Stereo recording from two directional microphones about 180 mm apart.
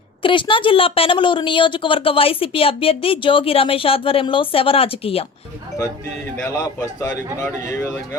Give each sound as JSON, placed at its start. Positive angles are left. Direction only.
{"t": 0.2, "sound": "a woman's voice", "side_deg": 30}
{"t": 6.1, "sound": "a man's voice", "side_deg": 15}